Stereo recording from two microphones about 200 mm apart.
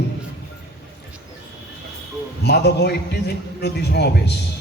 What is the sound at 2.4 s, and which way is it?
A man's voice, 55° left (ahead or behind).